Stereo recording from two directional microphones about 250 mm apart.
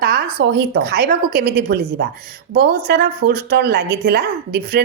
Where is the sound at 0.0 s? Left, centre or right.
Right.